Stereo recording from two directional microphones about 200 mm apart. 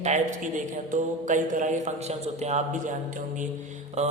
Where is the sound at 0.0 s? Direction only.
35° right (ahead or behind).